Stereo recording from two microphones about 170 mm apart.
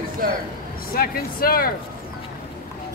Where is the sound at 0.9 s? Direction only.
60° left (ahead or behind).